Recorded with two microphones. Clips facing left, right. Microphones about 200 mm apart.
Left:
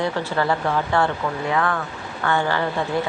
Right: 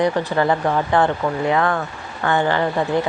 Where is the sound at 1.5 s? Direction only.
30° right (ahead or behind).